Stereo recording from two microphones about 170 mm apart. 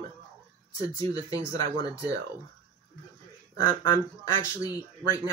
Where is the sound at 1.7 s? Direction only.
20° left (ahead or behind).